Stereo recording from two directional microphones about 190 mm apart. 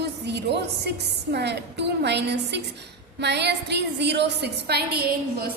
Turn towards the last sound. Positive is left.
turn(degrees=-55)  # may be behind; listen again after turning